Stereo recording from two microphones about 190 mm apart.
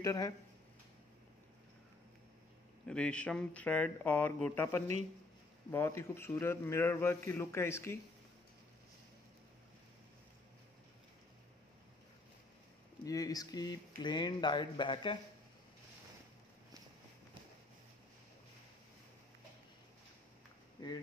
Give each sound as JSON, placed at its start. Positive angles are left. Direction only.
{"t": 0.0, "sound": "speech", "side_deg": 15}
{"t": 2.9, "sound": "a man's voice", "side_deg": 5}
{"t": 13.0, "sound": "speech", "side_deg": 20}
{"t": 20.8, "sound": "a sound", "side_deg": 20}